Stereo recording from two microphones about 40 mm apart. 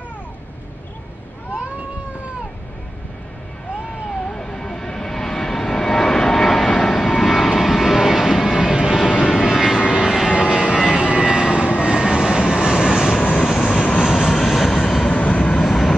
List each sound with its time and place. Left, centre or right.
4.2 s vehicle: centre
13.2 s vehicle: left
13.6 s vehicle: centre
15.0 s vehicle: left
15.6 s vehicle: centre